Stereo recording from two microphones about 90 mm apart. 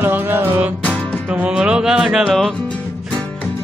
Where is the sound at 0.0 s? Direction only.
20° right (ahead or behind).